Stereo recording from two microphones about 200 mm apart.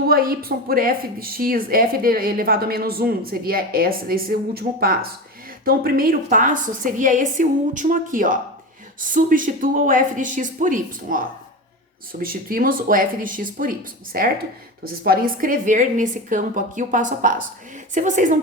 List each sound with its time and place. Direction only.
0.1 s a woman's voice: 50° right (ahead or behind)